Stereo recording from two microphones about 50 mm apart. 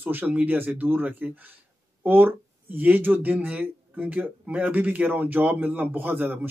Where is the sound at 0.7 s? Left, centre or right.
Right.